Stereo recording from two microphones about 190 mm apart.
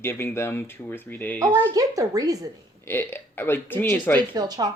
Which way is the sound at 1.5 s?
15° right (ahead or behind).